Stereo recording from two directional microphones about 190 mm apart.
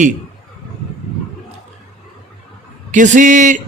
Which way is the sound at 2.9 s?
40° right (ahead or behind).